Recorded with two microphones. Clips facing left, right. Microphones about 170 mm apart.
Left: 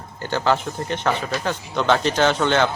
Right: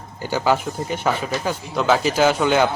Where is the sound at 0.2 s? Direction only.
10° right (ahead or behind).